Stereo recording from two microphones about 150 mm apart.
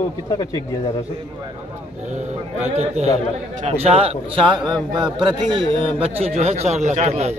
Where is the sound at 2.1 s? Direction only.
45° right (ahead or behind).